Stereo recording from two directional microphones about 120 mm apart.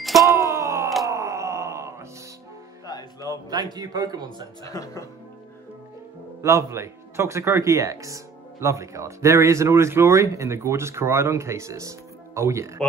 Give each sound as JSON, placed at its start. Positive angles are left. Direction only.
{"t": 0.2, "sound": "wail", "side_deg": -25}
{"t": 2.9, "sound": "music", "side_deg": 30}
{"t": 3.7, "sound": "speech", "side_deg": -30}
{"t": 4.6, "sound": "speech", "side_deg": 30}
{"t": 6.4, "sound": "speech", "side_deg": -25}